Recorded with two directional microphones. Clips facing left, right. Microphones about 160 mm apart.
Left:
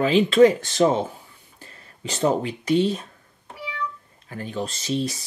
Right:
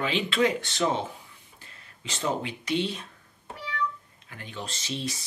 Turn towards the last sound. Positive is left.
turn(degrees=40)  # may be behind; listen again after turning